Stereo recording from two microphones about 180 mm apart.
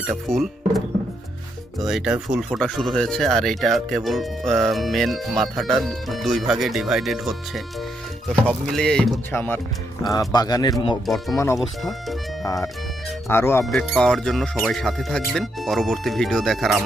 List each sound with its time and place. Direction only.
0.1 s speech: centre (ahead or behind)
1.8 s speech: centre (ahead or behind)
8.6 s speech: 5° left (ahead or behind); by 10.9 s 20° left (ahead or behind)
11.0 s speech: centre (ahead or behind)
13.2 s speech: 15° left (ahead or behind)
13.7 s speech: 5° left (ahead or behind)